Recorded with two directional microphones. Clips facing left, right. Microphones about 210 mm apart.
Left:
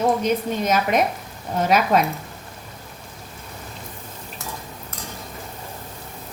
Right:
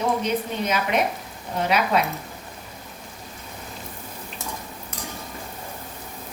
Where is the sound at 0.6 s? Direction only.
45° left (ahead or behind).